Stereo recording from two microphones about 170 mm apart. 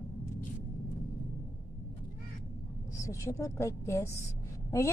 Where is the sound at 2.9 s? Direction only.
20° left (ahead or behind).